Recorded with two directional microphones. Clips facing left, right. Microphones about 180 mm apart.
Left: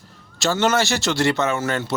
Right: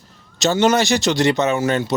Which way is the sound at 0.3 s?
20° right (ahead or behind).